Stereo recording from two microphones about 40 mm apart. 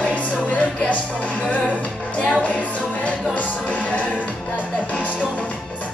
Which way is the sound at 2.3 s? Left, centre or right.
Left.